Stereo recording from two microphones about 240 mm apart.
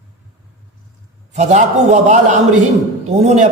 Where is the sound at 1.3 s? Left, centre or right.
Right.